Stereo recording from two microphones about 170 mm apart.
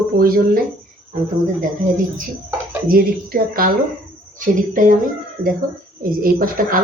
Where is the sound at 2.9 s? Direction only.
60° right (ahead or behind).